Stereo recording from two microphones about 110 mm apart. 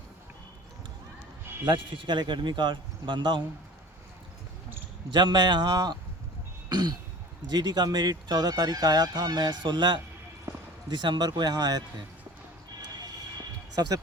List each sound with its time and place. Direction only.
1.6 s speech: 50° right (ahead or behind)
5.1 s speech: 40° right (ahead or behind)
6.7 s throat clearing: 40° right (ahead or behind)
7.5 s speech: 40° right (ahead or behind)
13.7 s speech: 35° right (ahead or behind)